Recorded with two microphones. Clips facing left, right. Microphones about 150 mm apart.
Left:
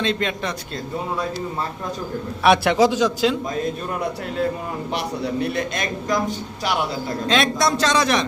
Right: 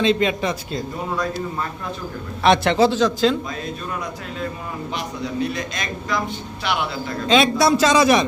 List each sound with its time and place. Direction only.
0.0 s a man's voice: 5° right (ahead or behind)
2.4 s a man's voice: 10° left (ahead or behind)
4.9 s a man's voice: 60° left (ahead or behind); by 6.7 s 40° left (ahead or behind)
7.3 s a man's voice: centre (ahead or behind)